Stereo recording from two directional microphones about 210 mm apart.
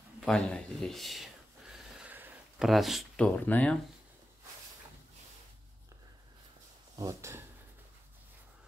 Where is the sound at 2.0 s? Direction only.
10° right (ahead or behind).